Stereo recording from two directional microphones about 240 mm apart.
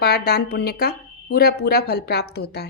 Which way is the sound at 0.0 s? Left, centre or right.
Left.